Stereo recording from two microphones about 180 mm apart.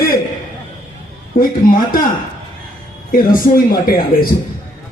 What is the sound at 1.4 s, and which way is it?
Speech, 50° left (ahead or behind).